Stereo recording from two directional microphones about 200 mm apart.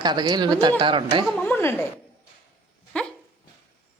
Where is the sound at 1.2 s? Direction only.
5° left (ahead or behind).